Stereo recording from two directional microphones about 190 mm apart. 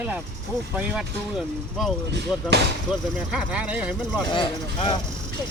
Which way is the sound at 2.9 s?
5° right (ahead or behind).